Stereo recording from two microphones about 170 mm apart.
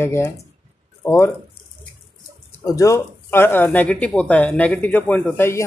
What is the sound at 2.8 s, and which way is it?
Speech, 15° left (ahead or behind).